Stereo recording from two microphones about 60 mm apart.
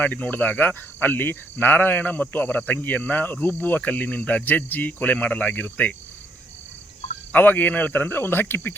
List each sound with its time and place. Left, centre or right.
0.0 s speech: left
7.3 s speech: left